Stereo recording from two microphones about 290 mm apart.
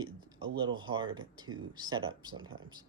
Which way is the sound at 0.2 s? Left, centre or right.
Centre.